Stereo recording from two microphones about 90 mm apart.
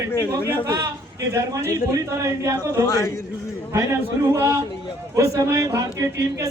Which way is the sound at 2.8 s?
35° left (ahead or behind).